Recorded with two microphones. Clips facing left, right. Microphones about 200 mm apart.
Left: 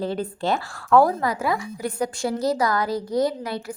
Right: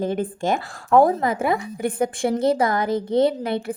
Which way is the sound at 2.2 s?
55° right (ahead or behind).